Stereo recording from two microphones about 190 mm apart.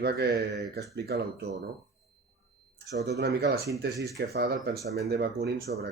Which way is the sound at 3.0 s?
60° right (ahead or behind).